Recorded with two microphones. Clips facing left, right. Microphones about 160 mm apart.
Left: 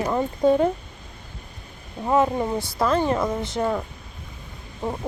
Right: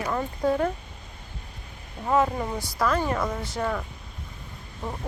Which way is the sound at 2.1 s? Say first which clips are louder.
Left 3 dB; 20° left (ahead or behind).